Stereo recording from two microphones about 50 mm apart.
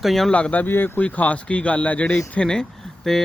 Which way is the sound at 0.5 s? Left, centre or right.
Left.